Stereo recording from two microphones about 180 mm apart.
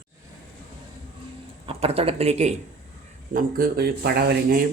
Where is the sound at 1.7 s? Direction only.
35° right (ahead or behind).